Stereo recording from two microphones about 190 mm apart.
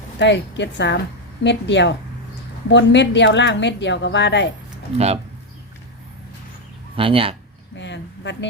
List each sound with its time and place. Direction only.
0.2 s a woman's voice: 70° left (ahead or behind)
4.9 s speech: 35° right (ahead or behind)
6.9 s speech: 30° right (ahead or behind)
7.8 s a woman's voice: 70° left (ahead or behind)